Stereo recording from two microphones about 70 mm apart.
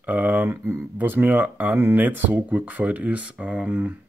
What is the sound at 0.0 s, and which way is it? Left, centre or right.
Speech, right.